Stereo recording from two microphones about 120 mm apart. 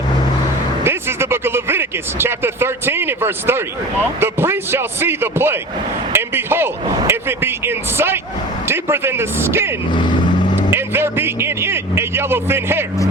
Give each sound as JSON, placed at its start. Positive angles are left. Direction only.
{"t": 0.9, "sound": "a man's voice", "side_deg": -20}
{"t": 9.9, "sound": "vehicle", "side_deg": 40}
{"t": 10.7, "sound": "a man's voice", "side_deg": -20}